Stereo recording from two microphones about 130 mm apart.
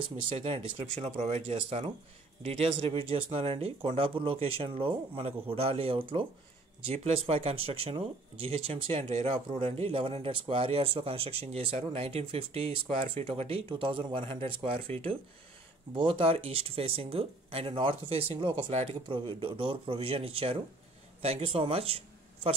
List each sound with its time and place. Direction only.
0.2 s speech: 45° right (ahead or behind)